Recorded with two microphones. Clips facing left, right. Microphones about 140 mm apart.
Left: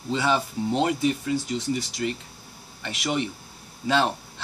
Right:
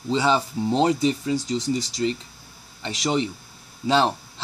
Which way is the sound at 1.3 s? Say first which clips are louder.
Right 2 dB; 90° right.